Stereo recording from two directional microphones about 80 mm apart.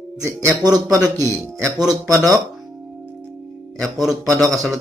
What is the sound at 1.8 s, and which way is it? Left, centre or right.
Speech, centre.